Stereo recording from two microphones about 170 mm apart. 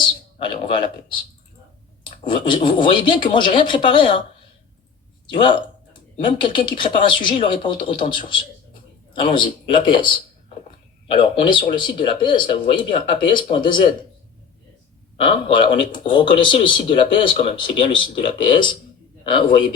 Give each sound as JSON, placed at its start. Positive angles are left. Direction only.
{"t": 0.3, "sound": "a man's voice", "side_deg": 30}
{"t": 2.0, "sound": "speech", "side_deg": 30}
{"t": 5.3, "sound": "speech", "side_deg": 30}
{"t": 11.1, "sound": "speech", "side_deg": 30}
{"t": 15.2, "sound": "speech", "side_deg": 30}